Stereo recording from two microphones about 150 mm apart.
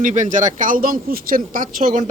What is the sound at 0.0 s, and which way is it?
Speech, 55° right (ahead or behind).